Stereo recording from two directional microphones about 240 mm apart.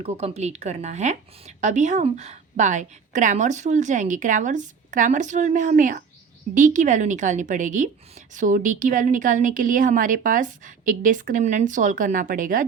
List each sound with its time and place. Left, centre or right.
0.0 s a woman's voice: right